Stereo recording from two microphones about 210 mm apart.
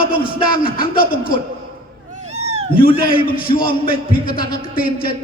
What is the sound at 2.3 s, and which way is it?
Cat, 30° right (ahead or behind).